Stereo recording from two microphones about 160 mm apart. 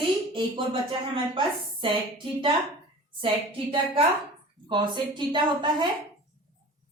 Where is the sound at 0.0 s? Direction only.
30° right (ahead or behind).